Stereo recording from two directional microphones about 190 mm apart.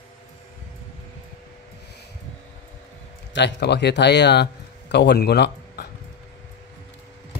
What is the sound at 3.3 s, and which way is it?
Speech, 65° left (ahead or behind).